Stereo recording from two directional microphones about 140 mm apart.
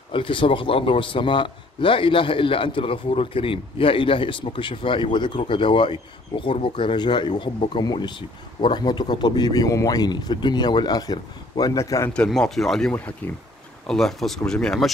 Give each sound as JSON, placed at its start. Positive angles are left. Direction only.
{"t": 0.1, "sound": "a man's voice", "side_deg": 35}
{"t": 12.1, "sound": "speech", "side_deg": 5}